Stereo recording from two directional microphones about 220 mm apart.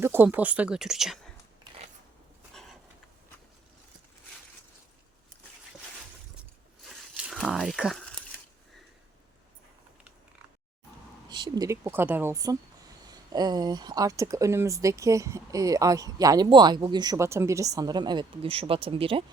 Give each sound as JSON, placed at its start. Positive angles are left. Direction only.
{"t": 0.0, "sound": "speech", "side_deg": -10}
{"t": 2.5, "sound": "a sound", "side_deg": 0}
{"t": 6.8, "sound": "crumpling", "side_deg": 0}
{"t": 11.3, "sound": "speech", "side_deg": -20}